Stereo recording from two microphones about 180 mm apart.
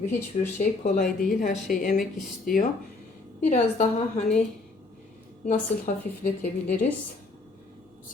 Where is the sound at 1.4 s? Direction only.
45° left (ahead or behind).